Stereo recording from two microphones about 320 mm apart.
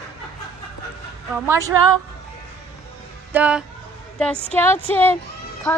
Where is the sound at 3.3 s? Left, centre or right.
Centre.